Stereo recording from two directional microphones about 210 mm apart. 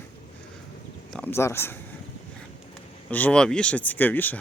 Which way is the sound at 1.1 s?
10° left (ahead or behind).